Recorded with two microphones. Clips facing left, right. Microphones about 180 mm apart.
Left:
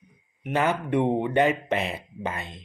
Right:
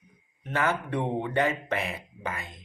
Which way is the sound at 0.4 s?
20° left (ahead or behind).